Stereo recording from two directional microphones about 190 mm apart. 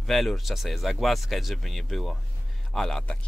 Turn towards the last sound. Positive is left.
turn(degrees=5)  # may be behind; listen again after turning